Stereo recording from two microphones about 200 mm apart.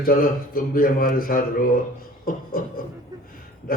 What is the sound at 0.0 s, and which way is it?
Speech, 45° left (ahead or behind).